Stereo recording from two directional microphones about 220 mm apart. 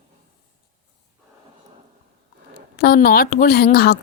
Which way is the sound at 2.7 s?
45° left (ahead or behind).